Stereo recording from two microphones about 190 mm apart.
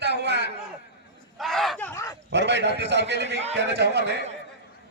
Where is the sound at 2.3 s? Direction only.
65° right (ahead or behind).